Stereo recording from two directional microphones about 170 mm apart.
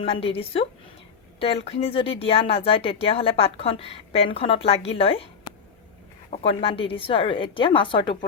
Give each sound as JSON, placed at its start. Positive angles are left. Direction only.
{"t": 0.0, "sound": "speech", "side_deg": 35}